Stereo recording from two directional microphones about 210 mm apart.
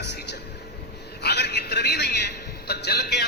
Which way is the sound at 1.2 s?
50° left (ahead or behind).